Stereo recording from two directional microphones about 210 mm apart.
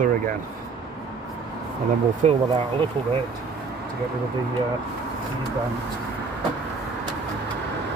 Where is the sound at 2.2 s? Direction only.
30° right (ahead or behind).